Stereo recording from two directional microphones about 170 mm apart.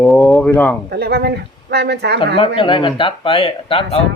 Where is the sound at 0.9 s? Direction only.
70° right (ahead or behind).